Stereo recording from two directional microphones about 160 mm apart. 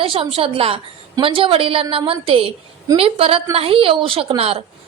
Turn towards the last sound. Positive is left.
turn(degrees=-35)  # may be behind; listen again after turning